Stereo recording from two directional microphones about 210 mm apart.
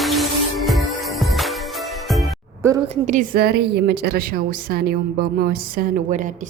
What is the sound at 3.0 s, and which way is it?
A woman's voice, 40° right (ahead or behind).